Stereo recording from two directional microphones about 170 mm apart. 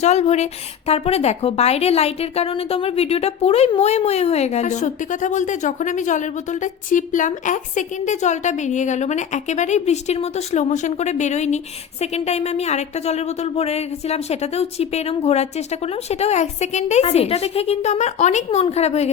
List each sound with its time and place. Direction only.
0.0 s a woman's voice: 40° left (ahead or behind)